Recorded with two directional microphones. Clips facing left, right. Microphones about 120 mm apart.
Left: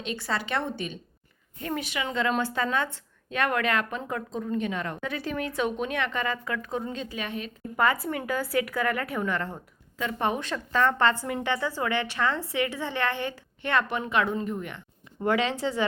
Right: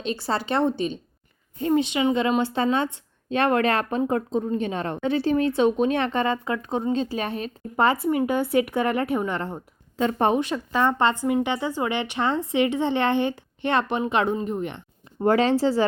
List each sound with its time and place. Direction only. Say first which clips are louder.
0.0 s a woman's voice: right 5 dB; 35° right (ahead or behind)
10.3 s speech: right 4 dB; 15° right (ahead or behind)
15.2 s a woman's voice: right 6 dB; 35° right (ahead or behind)